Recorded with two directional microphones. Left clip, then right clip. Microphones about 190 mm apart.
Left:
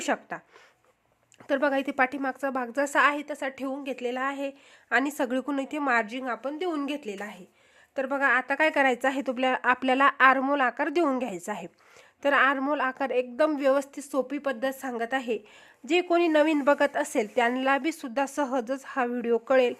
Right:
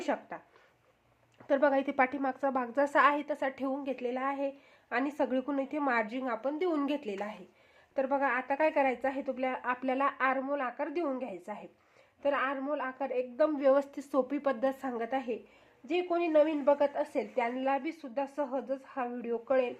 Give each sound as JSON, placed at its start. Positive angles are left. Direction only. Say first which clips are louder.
{"t": 0.0, "sound": "a woman's voice", "louder": "left 5 dB", "side_deg": 40}
{"t": 1.5, "sound": "a woman's voice", "louder": "left 2 dB", "side_deg": 25}
{"t": 15.9, "sound": "a woman's voice", "louder": "left 6 dB", "side_deg": 60}